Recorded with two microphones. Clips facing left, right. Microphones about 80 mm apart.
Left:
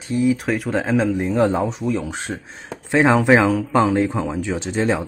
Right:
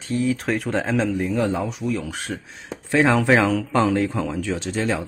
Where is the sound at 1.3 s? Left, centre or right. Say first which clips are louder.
Left 4 dB; left.